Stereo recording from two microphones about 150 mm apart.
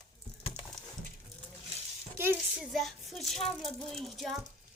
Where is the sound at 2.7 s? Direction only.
Centre (ahead or behind).